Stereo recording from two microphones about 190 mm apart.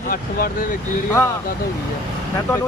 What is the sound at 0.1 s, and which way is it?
Speech, 50° left (ahead or behind).